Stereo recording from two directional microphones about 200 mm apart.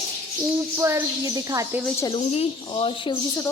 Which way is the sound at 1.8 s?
5° left (ahead or behind).